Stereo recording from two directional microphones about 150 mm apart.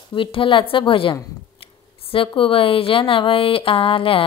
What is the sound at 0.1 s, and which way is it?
Speech, 35° left (ahead or behind).